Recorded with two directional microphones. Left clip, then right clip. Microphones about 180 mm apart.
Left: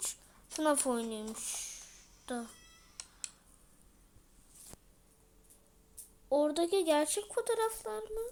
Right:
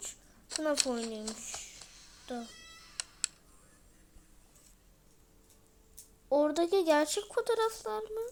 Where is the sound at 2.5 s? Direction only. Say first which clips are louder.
Right 8 dB; 45° right (ahead or behind).